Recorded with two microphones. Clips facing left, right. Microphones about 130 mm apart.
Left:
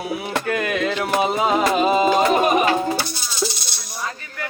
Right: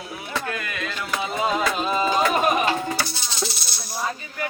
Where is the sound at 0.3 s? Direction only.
90° left.